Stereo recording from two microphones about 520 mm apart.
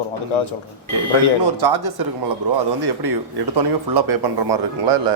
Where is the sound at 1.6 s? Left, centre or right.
Right.